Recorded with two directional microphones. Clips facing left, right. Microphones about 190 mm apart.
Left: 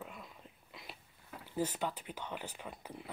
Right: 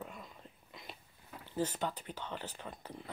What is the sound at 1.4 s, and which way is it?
Speech, 10° left (ahead or behind).